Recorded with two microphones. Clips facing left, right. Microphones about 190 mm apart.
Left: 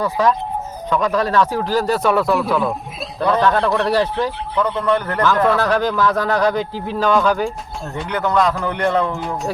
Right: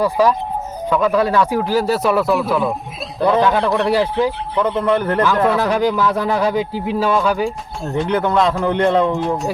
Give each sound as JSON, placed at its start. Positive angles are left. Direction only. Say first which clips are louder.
{"t": 0.0, "sound": "a man's voice", "louder": "right 2 dB", "side_deg": -10}
{"t": 4.9, "sound": "speech", "louder": "right 4 dB", "side_deg": -20}
{"t": 5.2, "sound": "a man's voice", "louder": "even", "side_deg": -10}
{"t": 7.9, "sound": "speech", "louder": "right 4 dB", "side_deg": -25}